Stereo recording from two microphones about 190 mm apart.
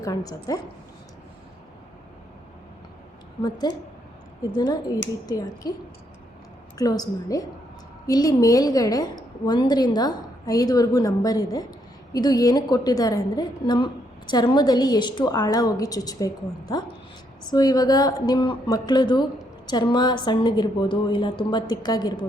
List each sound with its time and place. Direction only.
0.0 s a woman's voice: 20° left (ahead or behind)
3.7 s a woman's voice: 20° left (ahead or behind)
6.7 s a woman's voice: 20° left (ahead or behind)